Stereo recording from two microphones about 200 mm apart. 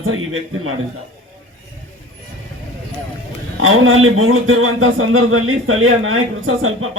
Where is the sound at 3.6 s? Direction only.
90° right.